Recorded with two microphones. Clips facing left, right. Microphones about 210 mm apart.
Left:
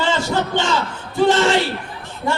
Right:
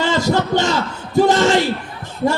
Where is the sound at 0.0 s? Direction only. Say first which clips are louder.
Right 3 dB; 40° right (ahead or behind).